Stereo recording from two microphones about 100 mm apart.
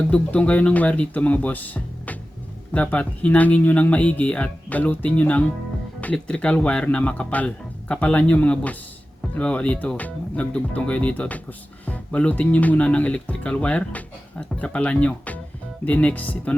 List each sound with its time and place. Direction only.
0.1 s speech: 15° left (ahead or behind)